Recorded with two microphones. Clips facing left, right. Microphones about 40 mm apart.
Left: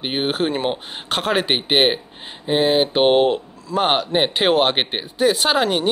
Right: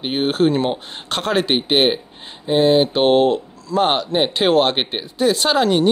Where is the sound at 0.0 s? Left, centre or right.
Centre.